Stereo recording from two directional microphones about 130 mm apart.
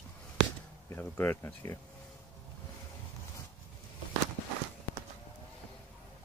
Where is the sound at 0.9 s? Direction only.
15° left (ahead or behind).